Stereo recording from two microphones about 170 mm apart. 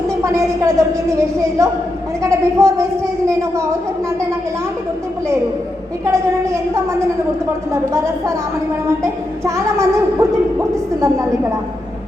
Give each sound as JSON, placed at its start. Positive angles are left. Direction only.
{"t": 0.2, "sound": "a woman's voice", "side_deg": -15}
{"t": 6.1, "sound": "a woman's voice", "side_deg": -15}